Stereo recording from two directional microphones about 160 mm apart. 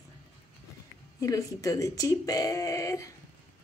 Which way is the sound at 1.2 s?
20° left (ahead or behind).